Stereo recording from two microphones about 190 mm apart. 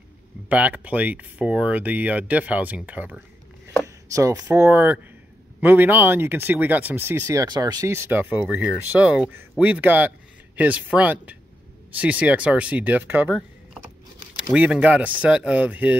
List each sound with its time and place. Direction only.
0.5 s speech: 10° right (ahead or behind)
14.5 s speech: 5° right (ahead or behind)